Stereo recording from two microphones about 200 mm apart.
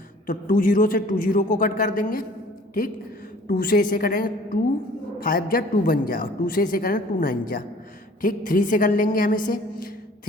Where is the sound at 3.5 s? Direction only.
45° left (ahead or behind).